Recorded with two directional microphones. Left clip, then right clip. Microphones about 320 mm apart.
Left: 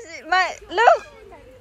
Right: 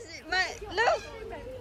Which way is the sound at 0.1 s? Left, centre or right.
Centre.